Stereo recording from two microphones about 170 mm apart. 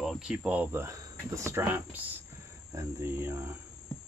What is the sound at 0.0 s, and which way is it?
Speech, centre (ahead or behind).